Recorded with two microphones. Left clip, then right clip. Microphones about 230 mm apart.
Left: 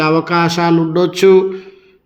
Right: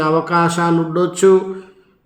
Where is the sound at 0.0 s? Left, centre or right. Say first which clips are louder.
Left 2 dB; left.